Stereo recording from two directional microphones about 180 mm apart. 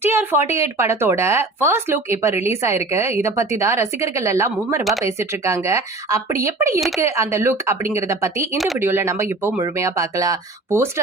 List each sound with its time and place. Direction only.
0.0 s speech: 10° right (ahead or behind)
4.8 s speech: centre (ahead or behind)
5.0 s speech: 15° right (ahead or behind)
8.5 s speech: centre (ahead or behind)
8.8 s speech: 15° right (ahead or behind)